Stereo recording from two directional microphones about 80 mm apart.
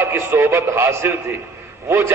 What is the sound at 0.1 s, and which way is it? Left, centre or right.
A man's voice, right.